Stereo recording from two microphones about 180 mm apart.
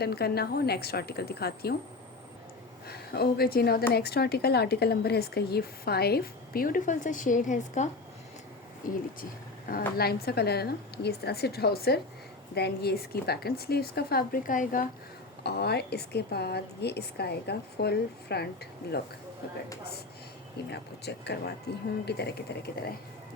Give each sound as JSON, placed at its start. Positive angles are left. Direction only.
{"t": 0.0, "sound": "a woman's voice", "side_deg": 60}
{"t": 2.8, "sound": "a woman's voice", "side_deg": 60}
{"t": 15.4, "sound": "a woman's voice", "side_deg": 65}
{"t": 20.7, "sound": "a woman's voice", "side_deg": 65}